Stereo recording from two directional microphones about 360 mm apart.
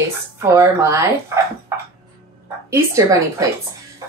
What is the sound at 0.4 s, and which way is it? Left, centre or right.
Speech, centre.